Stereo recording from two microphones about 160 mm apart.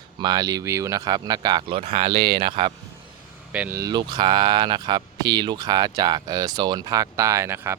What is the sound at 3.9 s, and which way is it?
Speech, 30° right (ahead or behind).